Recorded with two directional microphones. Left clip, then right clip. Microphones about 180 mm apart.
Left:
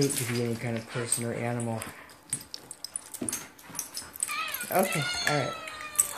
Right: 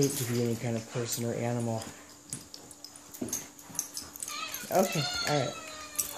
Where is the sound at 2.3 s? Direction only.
10° right (ahead or behind).